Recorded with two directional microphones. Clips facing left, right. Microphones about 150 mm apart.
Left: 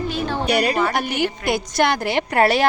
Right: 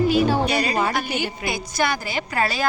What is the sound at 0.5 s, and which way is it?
A woman's voice, 60° left (ahead or behind).